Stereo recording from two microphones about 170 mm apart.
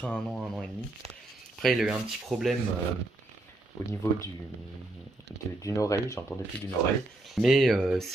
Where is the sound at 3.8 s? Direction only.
Centre (ahead or behind).